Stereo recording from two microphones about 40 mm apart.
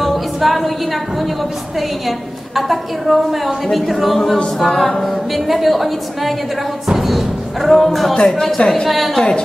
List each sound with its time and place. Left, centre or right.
0.0 s a sound: centre
1.8 s a woman's voice: centre
8.1 s a woman's voice: left
8.8 s a woman's voice: centre